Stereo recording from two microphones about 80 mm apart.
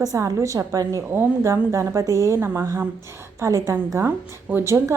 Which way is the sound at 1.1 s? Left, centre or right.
Right.